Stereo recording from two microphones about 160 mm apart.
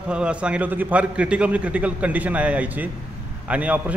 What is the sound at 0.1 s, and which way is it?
A man's voice, 5° right (ahead or behind).